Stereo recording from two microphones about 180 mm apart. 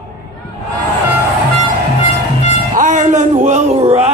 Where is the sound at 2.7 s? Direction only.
45° right (ahead or behind).